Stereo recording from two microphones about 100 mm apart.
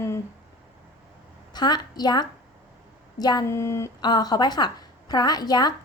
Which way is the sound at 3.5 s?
30° left (ahead or behind).